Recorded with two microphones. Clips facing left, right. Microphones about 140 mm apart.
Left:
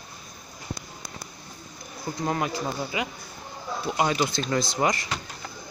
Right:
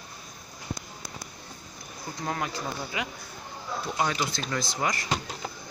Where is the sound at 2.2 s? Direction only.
15° left (ahead or behind).